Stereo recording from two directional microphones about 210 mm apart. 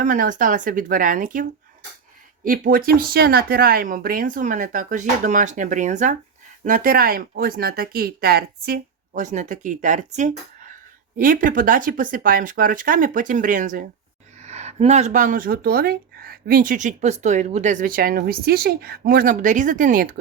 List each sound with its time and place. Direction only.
0.0 s speech: 40° right (ahead or behind)